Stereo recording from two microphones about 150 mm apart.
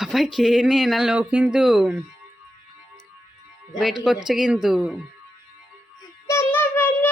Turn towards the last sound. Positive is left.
turn(degrees=15)  # may be behind; listen again after turning